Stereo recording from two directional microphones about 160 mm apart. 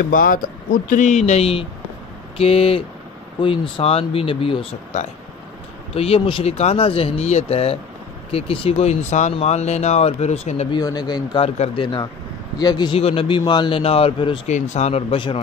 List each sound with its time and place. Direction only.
0.1 s speech: 60° left (ahead or behind); by 4.6 s 35° left (ahead or behind)
4.9 s speech: 50° left (ahead or behind)
5.9 s speech: 35° left (ahead or behind)
10.8 s speech: 25° left (ahead or behind)
11.4 s speech: 40° left (ahead or behind)
14.5 s speech: 45° left (ahead or behind)